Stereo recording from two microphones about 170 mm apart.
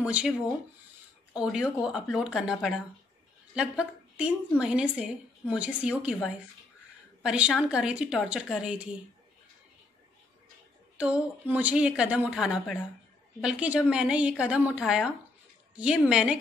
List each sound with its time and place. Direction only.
0.0 s a woman's voice: 5° right (ahead or behind)
7.2 s speech: 5° right (ahead or behind)
11.0 s a woman's voice: 5° right (ahead or behind)